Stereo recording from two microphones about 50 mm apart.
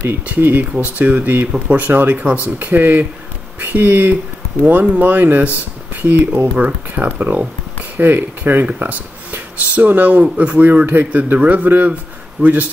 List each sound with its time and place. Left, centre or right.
0.0 s speech: right
6.5 s speech: right
8.0 s speech: right
8.6 s speech: right